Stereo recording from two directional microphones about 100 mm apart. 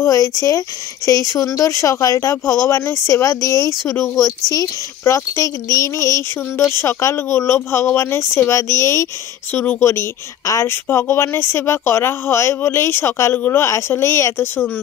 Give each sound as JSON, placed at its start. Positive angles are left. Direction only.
{"t": 0.0, "sound": "a woman's voice", "side_deg": 35}